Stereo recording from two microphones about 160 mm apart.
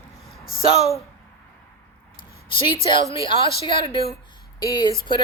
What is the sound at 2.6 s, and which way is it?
Speech, 30° left (ahead or behind).